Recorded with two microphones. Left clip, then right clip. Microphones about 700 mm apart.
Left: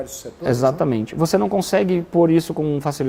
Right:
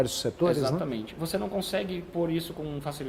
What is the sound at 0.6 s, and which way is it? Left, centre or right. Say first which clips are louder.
Speech: left 11 dB; left.